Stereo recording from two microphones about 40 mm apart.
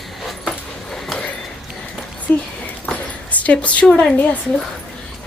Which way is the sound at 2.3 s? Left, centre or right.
Left.